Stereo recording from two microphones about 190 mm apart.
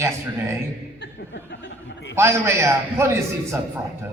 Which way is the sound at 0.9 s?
65° left (ahead or behind).